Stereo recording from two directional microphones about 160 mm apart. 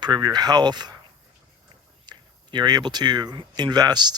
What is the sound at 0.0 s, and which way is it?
Speech, 25° right (ahead or behind).